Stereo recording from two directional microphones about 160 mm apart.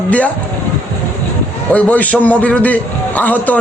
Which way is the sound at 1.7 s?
10° left (ahead or behind).